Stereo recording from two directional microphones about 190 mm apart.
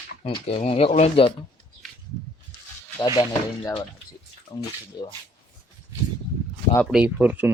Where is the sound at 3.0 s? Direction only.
20° left (ahead or behind).